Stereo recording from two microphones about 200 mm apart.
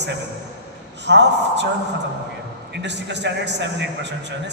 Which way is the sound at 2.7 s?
60° right (ahead or behind).